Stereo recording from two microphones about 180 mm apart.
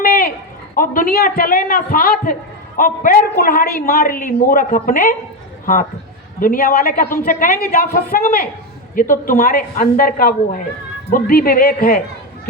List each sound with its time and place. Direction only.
0.0 s a sound: 55° left (ahead or behind)
0.8 s a man's voice: 50° left (ahead or behind)
6.4 s a woman's voice: 50° left (ahead or behind)